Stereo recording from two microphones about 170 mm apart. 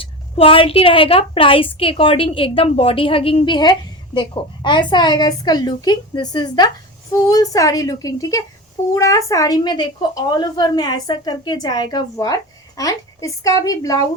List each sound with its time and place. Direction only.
0.0 s a woman's voice: 30° left (ahead or behind)